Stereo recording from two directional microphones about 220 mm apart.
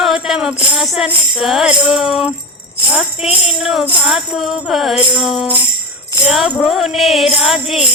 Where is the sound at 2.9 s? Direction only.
5° right (ahead or behind).